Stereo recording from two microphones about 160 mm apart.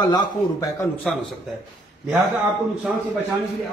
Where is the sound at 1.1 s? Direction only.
5° left (ahead or behind).